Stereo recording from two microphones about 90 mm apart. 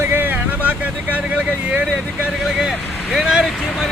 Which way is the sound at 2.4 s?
5° right (ahead or behind).